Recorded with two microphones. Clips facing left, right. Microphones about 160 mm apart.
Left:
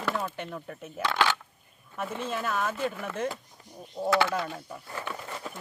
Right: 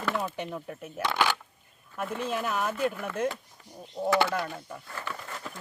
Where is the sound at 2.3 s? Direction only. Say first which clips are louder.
Even; 15° right (ahead or behind).